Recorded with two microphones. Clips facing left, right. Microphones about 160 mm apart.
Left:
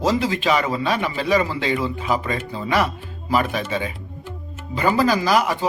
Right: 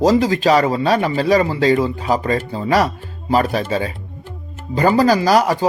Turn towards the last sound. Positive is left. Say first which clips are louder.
# right 5 dB
turn(degrees=-40)  # may be behind; listen again after turning